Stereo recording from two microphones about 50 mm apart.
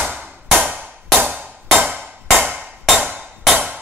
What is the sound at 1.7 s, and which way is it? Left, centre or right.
Music, right.